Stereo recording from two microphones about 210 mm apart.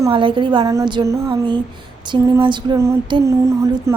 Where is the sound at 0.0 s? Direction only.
25° right (ahead or behind).